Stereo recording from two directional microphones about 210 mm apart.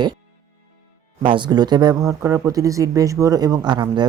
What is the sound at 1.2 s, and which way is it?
Speech, 20° right (ahead or behind).